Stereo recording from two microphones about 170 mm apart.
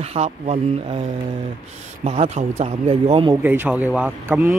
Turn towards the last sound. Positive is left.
turn(degrees=-10)  # may be behind; listen again after turning